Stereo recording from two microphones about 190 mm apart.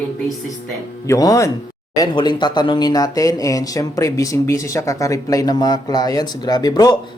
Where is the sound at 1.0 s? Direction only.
20° left (ahead or behind).